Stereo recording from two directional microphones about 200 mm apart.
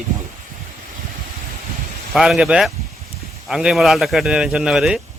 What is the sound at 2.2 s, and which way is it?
A man's voice, centre (ahead or behind).